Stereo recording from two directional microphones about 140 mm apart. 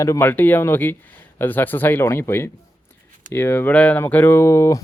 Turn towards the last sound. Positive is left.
turn(degrees=20)  # may be behind; listen again after turning